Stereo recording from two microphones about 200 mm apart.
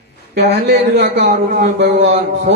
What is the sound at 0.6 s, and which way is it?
A man's voice, 60° right (ahead or behind).